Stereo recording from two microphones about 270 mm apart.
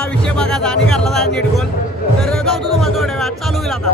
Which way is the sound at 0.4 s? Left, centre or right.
Centre.